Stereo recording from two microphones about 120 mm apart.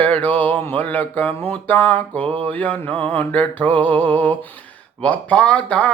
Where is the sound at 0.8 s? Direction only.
15° left (ahead or behind).